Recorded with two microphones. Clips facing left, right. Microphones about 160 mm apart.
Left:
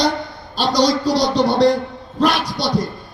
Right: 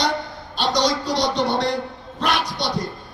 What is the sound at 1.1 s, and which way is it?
A man's voice, 35° left (ahead or behind).